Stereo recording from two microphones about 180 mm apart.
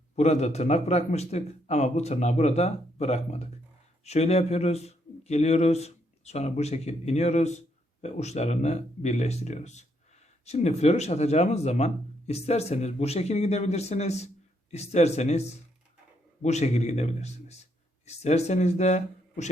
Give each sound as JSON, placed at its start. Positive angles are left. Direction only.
{"t": 0.2, "sound": "a man's voice", "side_deg": 40}